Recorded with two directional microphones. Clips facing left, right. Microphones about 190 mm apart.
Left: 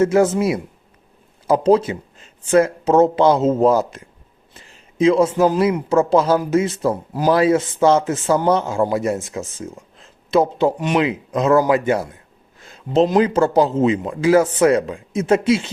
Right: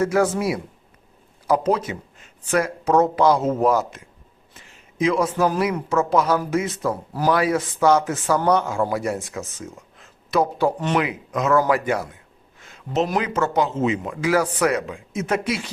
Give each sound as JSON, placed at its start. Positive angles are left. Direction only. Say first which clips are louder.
{"t": 0.0, "sound": "speech", "louder": "left 5 dB", "side_deg": 25}
{"t": 11.0, "sound": "a man's voice", "louder": "left 5 dB", "side_deg": 30}